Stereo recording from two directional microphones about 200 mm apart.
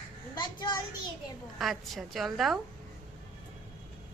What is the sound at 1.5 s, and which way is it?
A woman's voice, centre (ahead or behind).